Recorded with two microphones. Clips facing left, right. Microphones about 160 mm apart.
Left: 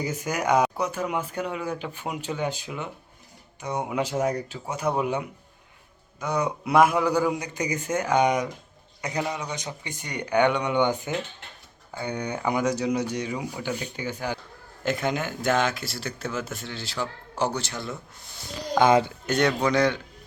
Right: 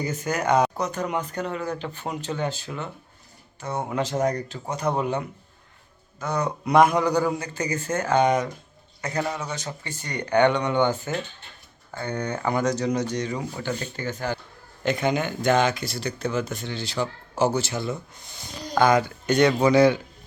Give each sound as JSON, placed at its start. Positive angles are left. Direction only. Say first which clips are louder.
{"t": 0.0, "sound": "speech", "louder": "right 1 dB", "side_deg": 10}
{"t": 14.8, "sound": "speech", "louder": "right 3 dB", "side_deg": 0}
{"t": 18.8, "sound": "speech", "louder": "even", "side_deg": 25}
{"t": 19.2, "sound": "speech", "louder": "right 4 dB", "side_deg": 0}